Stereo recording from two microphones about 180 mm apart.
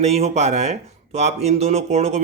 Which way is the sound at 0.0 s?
35° right (ahead or behind).